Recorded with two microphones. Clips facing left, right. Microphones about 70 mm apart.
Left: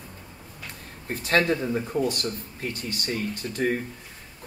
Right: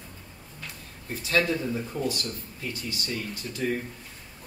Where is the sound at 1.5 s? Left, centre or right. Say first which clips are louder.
Left 4 dB; left.